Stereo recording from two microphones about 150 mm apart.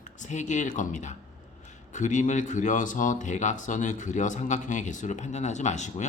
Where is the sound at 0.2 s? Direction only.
55° left (ahead or behind).